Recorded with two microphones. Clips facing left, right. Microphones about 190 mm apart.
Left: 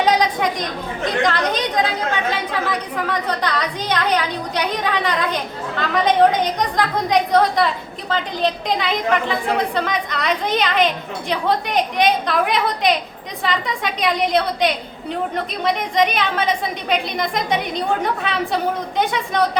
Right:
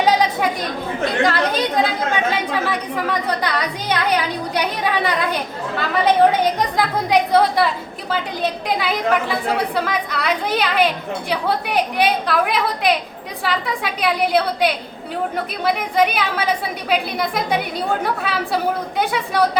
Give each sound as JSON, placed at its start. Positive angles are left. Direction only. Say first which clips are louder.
{"t": 0.0, "sound": "a woman's voice", "louder": "even", "side_deg": -5}